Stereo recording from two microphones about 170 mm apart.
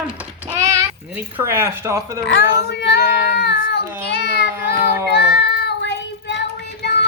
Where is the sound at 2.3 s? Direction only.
90° left.